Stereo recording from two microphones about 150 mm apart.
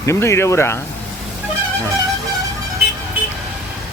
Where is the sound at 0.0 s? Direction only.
20° left (ahead or behind).